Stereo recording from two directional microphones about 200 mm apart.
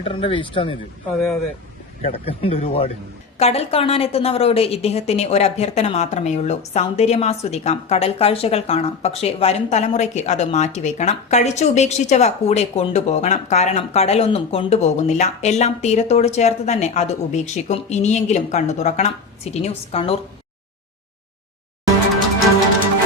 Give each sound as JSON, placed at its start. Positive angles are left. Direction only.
{"t": 0.0, "sound": "a man's voice", "side_deg": 25}
{"t": 2.0, "sound": "a man's voice", "side_deg": 30}